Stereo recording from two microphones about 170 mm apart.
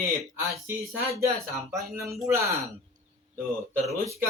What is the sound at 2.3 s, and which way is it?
Speech, 15° right (ahead or behind).